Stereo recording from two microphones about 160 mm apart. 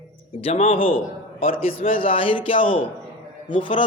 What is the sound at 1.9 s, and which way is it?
Speech, 35° left (ahead or behind).